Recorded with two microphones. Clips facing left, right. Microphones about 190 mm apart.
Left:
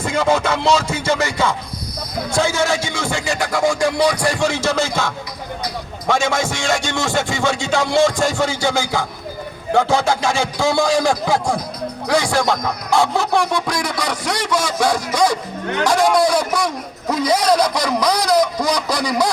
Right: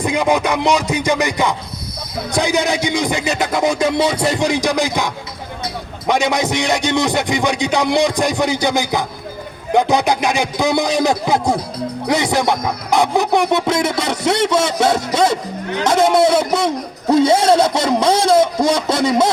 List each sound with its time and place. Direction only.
0.0 s music: 15° right (ahead or behind)
12.0 s a man's voice: 20° right (ahead or behind)